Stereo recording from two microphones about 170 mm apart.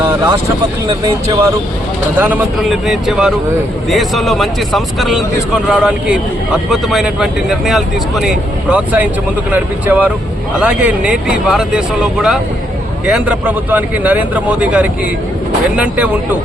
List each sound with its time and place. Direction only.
1.0 s a man's voice: 20° right (ahead or behind)